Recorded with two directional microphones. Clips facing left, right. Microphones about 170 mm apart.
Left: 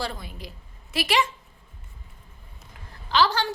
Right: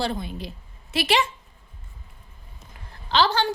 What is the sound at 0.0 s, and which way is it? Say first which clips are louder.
A woman's voice: right 5 dB; 25° right (ahead or behind).